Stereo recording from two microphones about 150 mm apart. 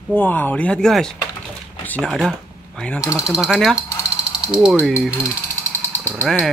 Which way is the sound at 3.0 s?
20° left (ahead or behind).